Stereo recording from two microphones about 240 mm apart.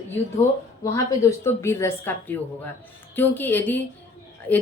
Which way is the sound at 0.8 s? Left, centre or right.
Centre.